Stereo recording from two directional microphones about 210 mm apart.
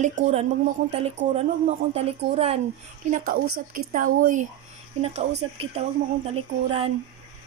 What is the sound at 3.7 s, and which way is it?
A woman's voice, 40° right (ahead or behind).